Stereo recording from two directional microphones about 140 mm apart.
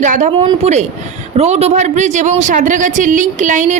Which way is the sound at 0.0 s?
60° right (ahead or behind).